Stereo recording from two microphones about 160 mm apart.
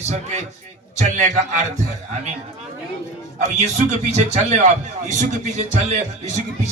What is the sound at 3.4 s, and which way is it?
A man's voice, 45° right (ahead or behind).